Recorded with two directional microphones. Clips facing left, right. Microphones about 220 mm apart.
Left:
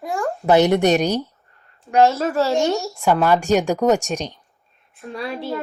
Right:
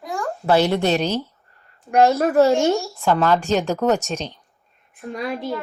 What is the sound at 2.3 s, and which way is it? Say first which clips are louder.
Speech: right 3 dB; 15° right (ahead or behind).